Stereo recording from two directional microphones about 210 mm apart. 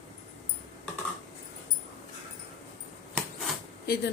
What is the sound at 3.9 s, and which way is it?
Speech, 50° left (ahead or behind).